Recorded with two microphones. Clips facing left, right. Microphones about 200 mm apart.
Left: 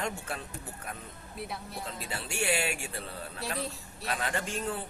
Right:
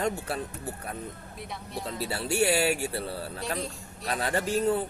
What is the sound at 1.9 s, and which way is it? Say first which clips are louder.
A man's voice: right 10 dB; 35° right (ahead or behind).